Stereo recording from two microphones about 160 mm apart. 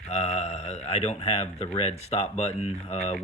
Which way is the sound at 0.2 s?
40° left (ahead or behind).